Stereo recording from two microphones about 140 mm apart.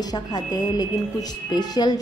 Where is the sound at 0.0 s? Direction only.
30° left (ahead or behind).